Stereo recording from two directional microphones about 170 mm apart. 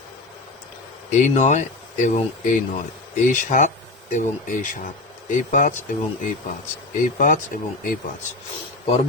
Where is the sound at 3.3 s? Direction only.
50° left (ahead or behind).